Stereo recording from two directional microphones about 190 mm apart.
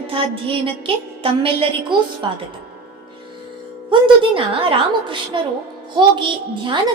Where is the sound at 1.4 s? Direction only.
30° right (ahead or behind).